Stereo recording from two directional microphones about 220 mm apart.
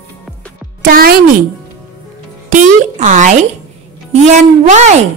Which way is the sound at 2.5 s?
35° right (ahead or behind).